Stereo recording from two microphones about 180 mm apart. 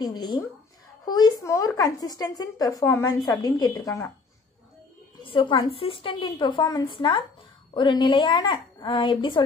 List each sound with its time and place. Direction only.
0.0 s speech: 20° left (ahead or behind)
5.2 s speech: 30° left (ahead or behind)